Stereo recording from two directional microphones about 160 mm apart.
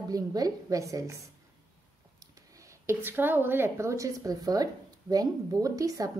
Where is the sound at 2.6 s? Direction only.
15° right (ahead or behind).